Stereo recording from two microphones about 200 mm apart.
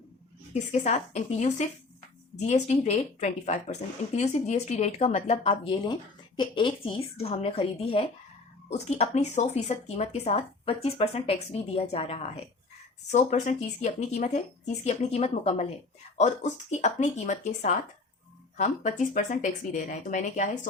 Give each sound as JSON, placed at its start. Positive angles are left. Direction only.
{"t": 0.7, "sound": "speech", "side_deg": 35}